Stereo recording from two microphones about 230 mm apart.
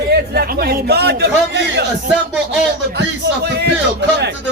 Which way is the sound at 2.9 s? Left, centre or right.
Right.